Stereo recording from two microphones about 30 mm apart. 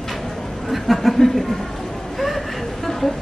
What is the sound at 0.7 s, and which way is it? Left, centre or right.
Speech, centre.